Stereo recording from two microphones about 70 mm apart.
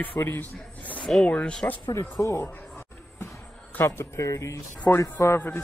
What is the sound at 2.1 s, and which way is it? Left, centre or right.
Speech, left.